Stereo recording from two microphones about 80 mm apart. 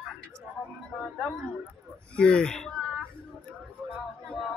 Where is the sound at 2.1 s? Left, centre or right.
Centre.